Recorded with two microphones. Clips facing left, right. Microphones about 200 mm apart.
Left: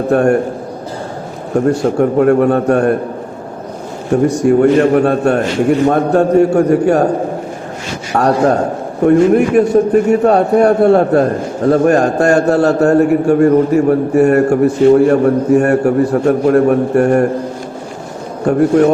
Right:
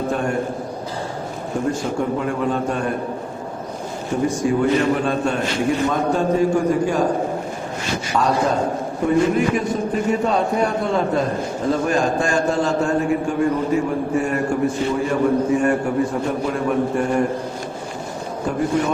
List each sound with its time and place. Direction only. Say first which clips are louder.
0.1 s a man's voice: left 15 dB; 70° left (ahead or behind)
1.8 s a man's voice: left 11 dB; 60° left (ahead or behind)
4.1 s a man's voice: left 9 dB; 65° left (ahead or behind)
8.1 s a man's voice: left 8 dB; 65° left (ahead or behind)